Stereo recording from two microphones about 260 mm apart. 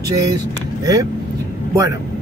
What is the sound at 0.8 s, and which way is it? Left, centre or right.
Speech, centre.